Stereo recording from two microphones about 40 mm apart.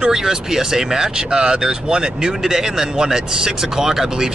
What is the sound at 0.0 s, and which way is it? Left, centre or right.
Speech, centre.